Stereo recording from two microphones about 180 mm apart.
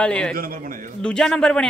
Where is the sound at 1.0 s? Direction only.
5° left (ahead or behind).